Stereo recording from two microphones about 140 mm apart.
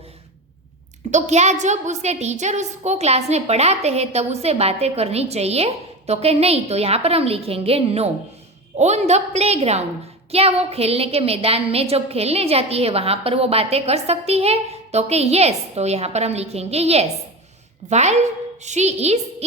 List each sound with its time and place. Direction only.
1.1 s a woman's voice: 55° right (ahead or behind)